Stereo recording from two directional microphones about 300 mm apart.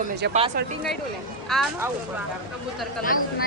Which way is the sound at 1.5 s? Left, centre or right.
Centre.